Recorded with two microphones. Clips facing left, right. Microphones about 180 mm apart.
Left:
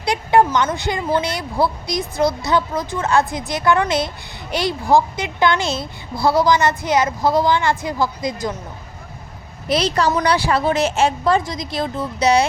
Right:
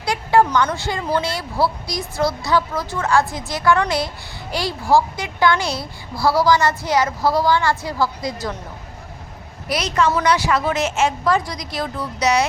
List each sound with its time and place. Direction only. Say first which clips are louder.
0.0 s a sound: left 1 dB; 20° left (ahead or behind)
0.5 s a woman's voice: left 1 dB; 20° left (ahead or behind)
9.6 s a woman's voice: left 2 dB; 30° left (ahead or behind)